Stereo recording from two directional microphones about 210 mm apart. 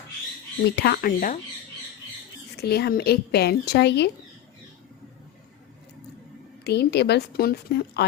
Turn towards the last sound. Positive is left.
turn(degrees=50)  # may be behind; listen again after turning